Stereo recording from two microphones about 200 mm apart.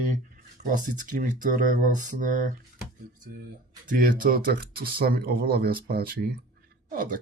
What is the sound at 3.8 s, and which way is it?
Speech, 45° right (ahead or behind).